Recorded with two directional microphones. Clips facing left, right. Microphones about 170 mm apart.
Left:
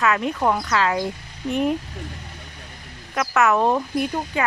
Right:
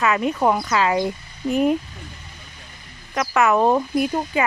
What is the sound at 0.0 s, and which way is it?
Speech, 5° right (ahead or behind).